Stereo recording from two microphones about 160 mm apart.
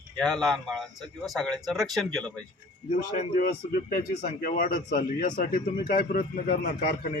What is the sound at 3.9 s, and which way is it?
Speech, 65° left (ahead or behind).